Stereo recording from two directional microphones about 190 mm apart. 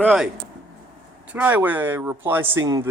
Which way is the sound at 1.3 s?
10° right (ahead or behind).